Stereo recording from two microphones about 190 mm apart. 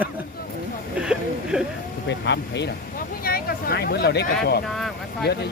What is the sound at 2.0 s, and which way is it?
Speech, 65° left (ahead or behind).